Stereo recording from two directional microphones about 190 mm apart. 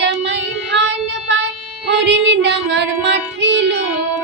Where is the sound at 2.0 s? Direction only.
65° right (ahead or behind).